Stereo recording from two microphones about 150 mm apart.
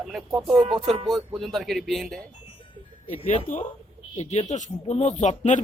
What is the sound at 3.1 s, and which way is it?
Speech, 50° left (ahead or behind).